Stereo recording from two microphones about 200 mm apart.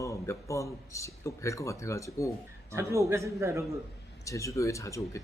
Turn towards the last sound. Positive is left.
turn(degrees=15)  # may be behind; listen again after turning